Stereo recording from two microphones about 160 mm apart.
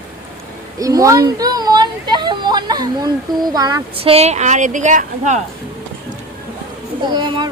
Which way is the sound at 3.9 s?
35° right (ahead or behind).